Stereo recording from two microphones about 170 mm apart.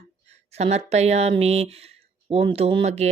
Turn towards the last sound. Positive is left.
turn(degrees=-40)  # may be behind; listen again after turning